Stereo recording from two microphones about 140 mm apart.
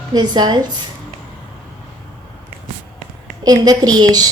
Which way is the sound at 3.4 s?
30° right (ahead or behind).